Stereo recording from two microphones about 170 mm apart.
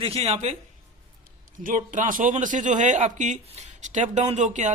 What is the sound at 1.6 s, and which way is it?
Speech, 50° right (ahead or behind).